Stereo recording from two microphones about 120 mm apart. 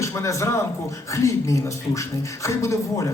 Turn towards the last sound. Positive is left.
turn(degrees=25)  # may be behind; listen again after turning